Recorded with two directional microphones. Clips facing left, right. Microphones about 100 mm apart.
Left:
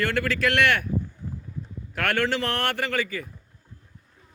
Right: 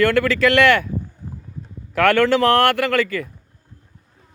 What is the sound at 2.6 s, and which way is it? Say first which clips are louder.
Speech: right 9 dB; 90° right.